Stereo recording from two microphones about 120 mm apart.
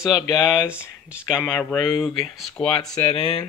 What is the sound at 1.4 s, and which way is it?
Speech, 10° left (ahead or behind).